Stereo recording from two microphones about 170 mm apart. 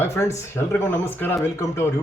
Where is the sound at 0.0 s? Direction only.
15° left (ahead or behind).